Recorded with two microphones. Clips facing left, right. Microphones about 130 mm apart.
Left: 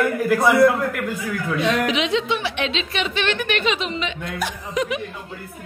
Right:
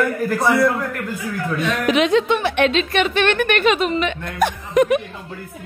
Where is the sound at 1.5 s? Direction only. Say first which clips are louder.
Right 3 dB; 50° right (ahead or behind).